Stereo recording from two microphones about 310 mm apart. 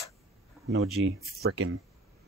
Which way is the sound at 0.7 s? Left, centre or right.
Right.